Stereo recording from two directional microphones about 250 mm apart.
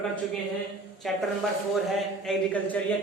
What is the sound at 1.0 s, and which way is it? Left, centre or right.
A man's voice, centre.